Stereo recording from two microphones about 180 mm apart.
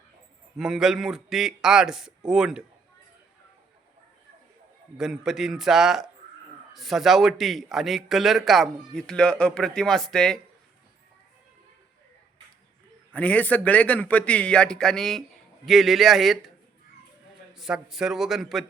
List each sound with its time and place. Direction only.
0.5 s a man's voice: centre (ahead or behind)
4.9 s a man's voice: centre (ahead or behind)
13.1 s a man's voice: 10° left (ahead or behind)
17.5 s a man's voice: centre (ahead or behind)